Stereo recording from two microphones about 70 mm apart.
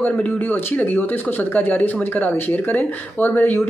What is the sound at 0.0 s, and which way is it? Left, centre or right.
Speech, left.